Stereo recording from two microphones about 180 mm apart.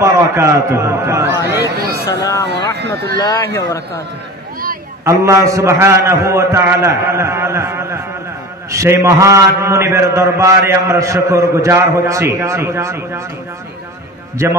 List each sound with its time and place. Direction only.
0.0 s a man's voice: 15° right (ahead or behind)
2.0 s speech: 15° left (ahead or behind)
2.4 s speech: 65° right (ahead or behind)
3.2 s speech: 15° left (ahead or behind)
5.0 s a man's voice: 15° right (ahead or behind)